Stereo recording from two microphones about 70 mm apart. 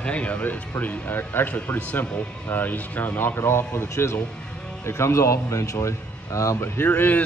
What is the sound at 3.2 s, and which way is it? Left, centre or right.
Speech, left.